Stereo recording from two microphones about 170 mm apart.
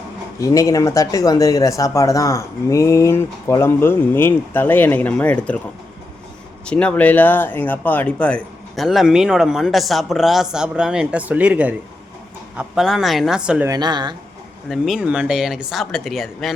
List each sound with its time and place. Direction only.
0.3 s speech: 20° left (ahead or behind)
6.7 s speech: 5° left (ahead or behind)
13.7 s speech: 25° right (ahead or behind)
14.7 s speech: 5° right (ahead or behind)